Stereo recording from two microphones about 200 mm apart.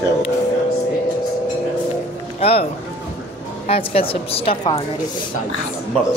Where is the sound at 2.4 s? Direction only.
30° left (ahead or behind).